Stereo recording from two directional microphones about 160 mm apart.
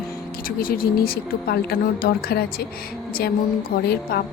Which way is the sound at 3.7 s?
65° left (ahead or behind).